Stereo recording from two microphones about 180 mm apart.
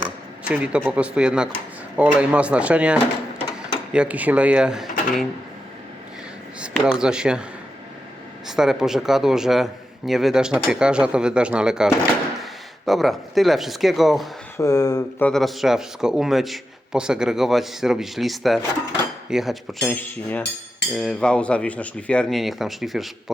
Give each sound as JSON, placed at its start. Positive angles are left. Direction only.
{"t": 0.4, "sound": "speech", "side_deg": -5}
{"t": 6.6, "sound": "speech", "side_deg": -5}
{"t": 8.4, "sound": "speech", "side_deg": -5}
{"t": 14.6, "sound": "speech", "side_deg": 20}
{"t": 15.3, "sound": "speech", "side_deg": 0}